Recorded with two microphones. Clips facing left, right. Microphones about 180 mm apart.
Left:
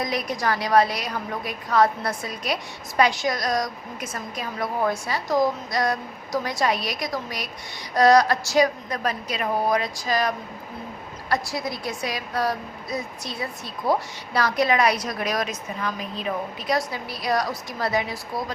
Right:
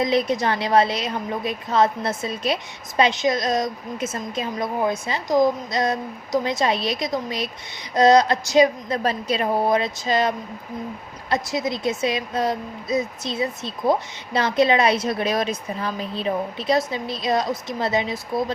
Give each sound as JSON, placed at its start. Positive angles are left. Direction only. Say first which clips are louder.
{"t": 0.0, "sound": "a woman's voice", "louder": "right 5 dB", "side_deg": -25}